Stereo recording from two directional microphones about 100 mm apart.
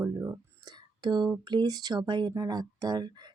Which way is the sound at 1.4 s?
45° right (ahead or behind).